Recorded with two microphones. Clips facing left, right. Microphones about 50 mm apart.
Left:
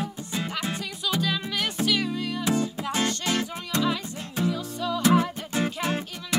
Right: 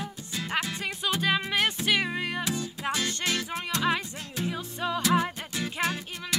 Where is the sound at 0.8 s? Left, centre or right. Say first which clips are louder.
Left 1 dB; right.